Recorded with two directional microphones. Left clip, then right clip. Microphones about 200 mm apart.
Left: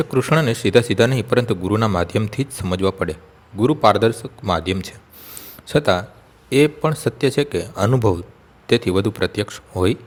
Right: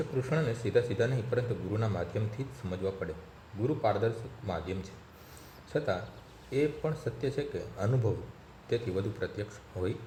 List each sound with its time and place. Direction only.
0.2 s a man's voice: 45° left (ahead or behind)